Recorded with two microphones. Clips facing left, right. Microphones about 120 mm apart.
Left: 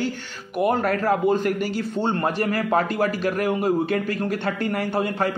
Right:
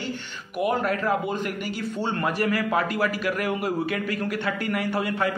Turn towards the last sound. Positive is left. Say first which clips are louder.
# left 2 dB
turn(degrees=35)  # may be behind; listen again after turning